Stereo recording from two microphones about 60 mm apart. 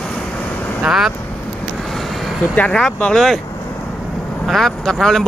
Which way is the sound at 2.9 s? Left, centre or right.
Left.